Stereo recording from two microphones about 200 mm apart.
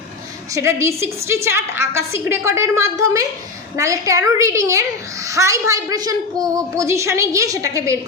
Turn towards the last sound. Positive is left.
turn(degrees=-15)  # may be behind; listen again after turning